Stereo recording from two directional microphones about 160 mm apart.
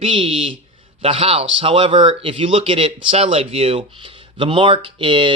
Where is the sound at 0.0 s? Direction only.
35° right (ahead or behind).